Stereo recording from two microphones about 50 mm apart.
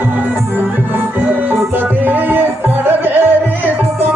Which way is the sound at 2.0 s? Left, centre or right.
Right.